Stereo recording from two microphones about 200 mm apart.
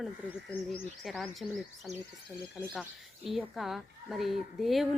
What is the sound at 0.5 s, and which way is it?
Speech, 10° left (ahead or behind).